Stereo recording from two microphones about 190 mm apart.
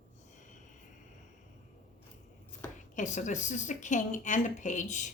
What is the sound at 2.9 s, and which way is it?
Speech, 40° left (ahead or behind).